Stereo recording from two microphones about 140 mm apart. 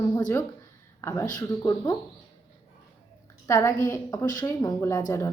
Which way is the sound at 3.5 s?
20° left (ahead or behind).